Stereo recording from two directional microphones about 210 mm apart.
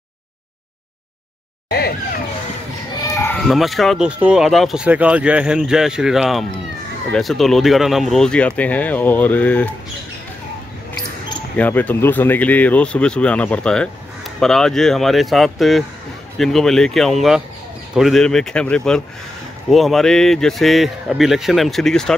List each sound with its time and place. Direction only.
1.7 s a sound: 50° left (ahead or behind)
3.2 s speech: 5° left (ahead or behind)
11.5 s speech: 5° left (ahead or behind)